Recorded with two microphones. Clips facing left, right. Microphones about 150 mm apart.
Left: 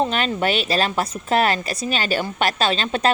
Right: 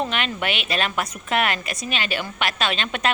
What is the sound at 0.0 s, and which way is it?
A woman's voice, 35° left (ahead or behind).